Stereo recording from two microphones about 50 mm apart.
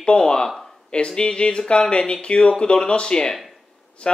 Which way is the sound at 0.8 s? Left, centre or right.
Centre.